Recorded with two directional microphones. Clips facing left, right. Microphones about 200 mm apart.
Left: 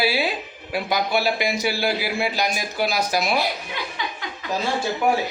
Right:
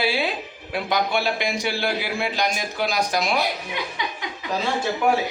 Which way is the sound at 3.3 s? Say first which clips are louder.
Even; 20° right (ahead or behind).